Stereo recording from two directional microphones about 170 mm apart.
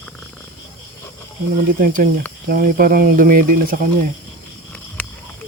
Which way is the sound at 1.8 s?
55° right (ahead or behind).